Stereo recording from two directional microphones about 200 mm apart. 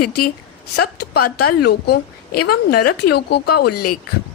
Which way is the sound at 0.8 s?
50° left (ahead or behind).